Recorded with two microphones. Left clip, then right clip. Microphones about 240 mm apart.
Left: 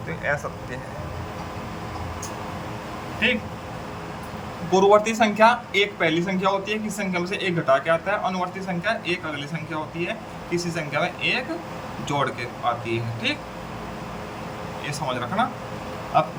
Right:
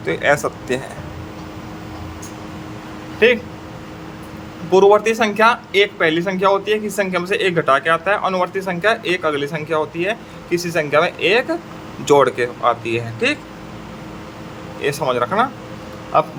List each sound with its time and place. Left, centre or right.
3.2 s speech: centre
4.7 s speech: centre
14.8 s speech: centre